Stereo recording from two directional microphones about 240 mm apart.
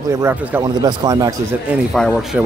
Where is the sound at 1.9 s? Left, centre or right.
Centre.